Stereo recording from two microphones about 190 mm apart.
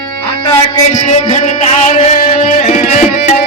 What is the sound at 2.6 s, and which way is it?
Tabla, 40° left (ahead or behind).